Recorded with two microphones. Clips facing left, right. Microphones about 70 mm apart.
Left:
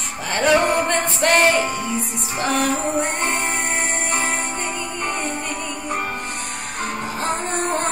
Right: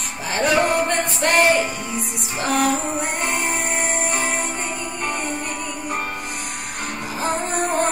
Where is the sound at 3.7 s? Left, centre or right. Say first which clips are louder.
Even; left.